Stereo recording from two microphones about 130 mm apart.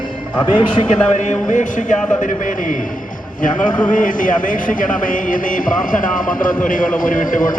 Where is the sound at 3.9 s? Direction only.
90° left.